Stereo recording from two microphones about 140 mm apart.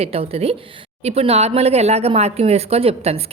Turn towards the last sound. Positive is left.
turn(degrees=-45)  # may be behind; listen again after turning